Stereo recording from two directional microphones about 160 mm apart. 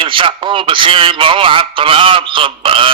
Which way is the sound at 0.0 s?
30° right (ahead or behind).